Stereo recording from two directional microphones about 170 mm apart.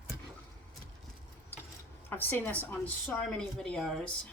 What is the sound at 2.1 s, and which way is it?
Speech, 10° left (ahead or behind).